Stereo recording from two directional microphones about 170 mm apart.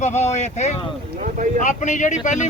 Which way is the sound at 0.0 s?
45° left (ahead or behind).